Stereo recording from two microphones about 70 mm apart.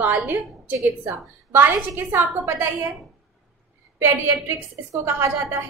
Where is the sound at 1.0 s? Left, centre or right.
Right.